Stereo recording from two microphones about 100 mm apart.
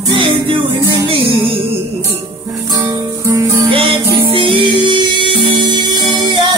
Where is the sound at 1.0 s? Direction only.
70° right (ahead or behind).